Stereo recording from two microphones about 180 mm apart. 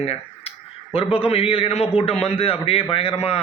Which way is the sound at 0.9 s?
30° left (ahead or behind).